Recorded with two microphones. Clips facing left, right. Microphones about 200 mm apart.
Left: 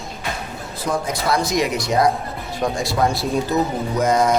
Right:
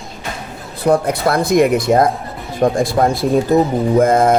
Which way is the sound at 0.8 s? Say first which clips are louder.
Right 9 dB; 60° right (ahead or behind).